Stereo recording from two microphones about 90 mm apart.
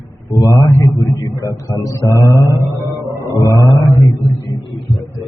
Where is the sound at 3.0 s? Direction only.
35° right (ahead or behind).